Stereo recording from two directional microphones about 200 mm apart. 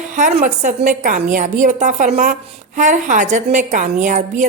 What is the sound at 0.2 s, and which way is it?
A woman's voice, 40° right (ahead or behind).